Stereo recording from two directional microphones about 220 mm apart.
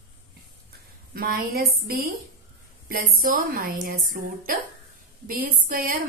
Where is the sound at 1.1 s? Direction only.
45° right (ahead or behind).